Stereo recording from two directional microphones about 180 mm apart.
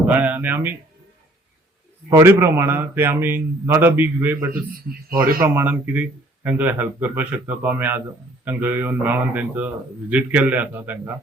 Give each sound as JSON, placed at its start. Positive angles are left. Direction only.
{"t": 0.0, "sound": "speech", "side_deg": -10}
{"t": 2.0, "sound": "speech", "side_deg": -15}
{"t": 4.5, "sound": "a man's voice", "side_deg": -55}
{"t": 5.4, "sound": "speech", "side_deg": -10}